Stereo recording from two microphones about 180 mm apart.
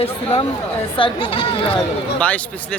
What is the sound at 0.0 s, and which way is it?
Speech, 35° left (ahead or behind).